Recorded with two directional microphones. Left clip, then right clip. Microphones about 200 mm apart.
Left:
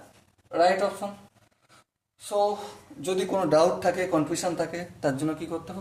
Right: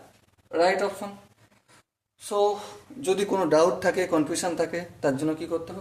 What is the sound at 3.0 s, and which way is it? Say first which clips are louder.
Speech: right 2 dB; 30° right (ahead or behind).